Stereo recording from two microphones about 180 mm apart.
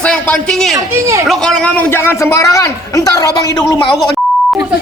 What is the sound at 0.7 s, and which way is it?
Speech, 15° right (ahead or behind).